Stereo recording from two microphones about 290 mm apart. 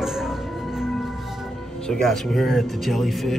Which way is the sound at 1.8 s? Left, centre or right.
Centre.